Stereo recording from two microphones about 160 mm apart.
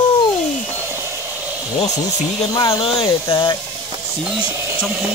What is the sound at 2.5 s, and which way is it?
Speech, 30° left (ahead or behind).